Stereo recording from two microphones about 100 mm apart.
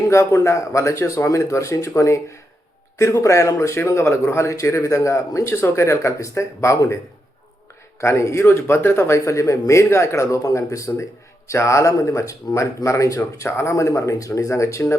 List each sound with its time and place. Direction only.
0.1 s speech: 30° left (ahead or behind)
8.0 s speech: 30° left (ahead or behind)